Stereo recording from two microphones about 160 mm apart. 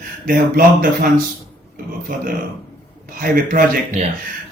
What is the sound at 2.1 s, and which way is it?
A man's voice, 60° right (ahead or behind).